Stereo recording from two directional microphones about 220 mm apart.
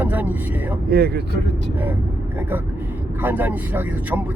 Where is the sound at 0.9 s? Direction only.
45° right (ahead or behind).